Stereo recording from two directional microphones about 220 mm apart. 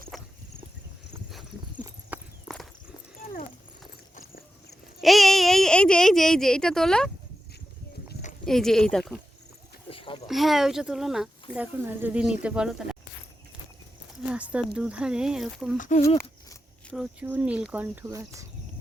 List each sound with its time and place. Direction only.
0.1 s a sound: centre (ahead or behind)
2.1 s walk: 5° right (ahead or behind)
4.9 s speech: centre (ahead or behind)
8.4 s speech: centre (ahead or behind)
9.9 s a sound: 25° left (ahead or behind)
10.2 s speech: centre (ahead or behind)
14.3 s speech: 5° right (ahead or behind)
15.8 s speech: 35° left (ahead or behind)
16.0 s a sound: 15° left (ahead or behind)
16.9 s speech: 5° right (ahead or behind)